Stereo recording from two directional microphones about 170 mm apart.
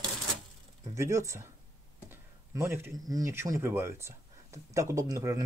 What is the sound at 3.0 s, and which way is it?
Speech, 20° right (ahead or behind).